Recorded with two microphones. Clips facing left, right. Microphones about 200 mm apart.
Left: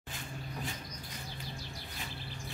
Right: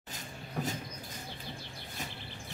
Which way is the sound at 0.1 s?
40° right (ahead or behind).